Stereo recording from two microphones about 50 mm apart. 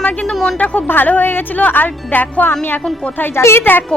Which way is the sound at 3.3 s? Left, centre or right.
Left.